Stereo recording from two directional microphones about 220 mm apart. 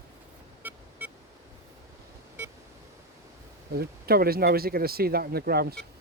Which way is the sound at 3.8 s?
45° right (ahead or behind).